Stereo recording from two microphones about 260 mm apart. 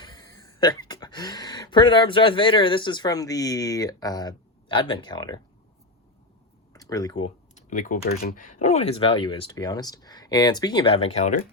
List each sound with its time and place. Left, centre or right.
0.0 s speech: centre
6.7 s speech: centre